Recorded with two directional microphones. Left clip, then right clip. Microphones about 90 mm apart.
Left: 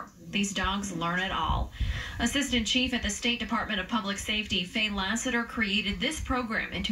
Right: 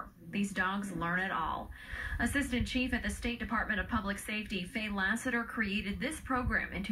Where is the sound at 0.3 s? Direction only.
15° left (ahead or behind).